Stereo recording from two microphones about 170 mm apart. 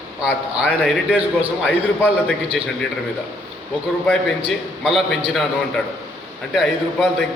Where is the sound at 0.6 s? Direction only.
5° right (ahead or behind).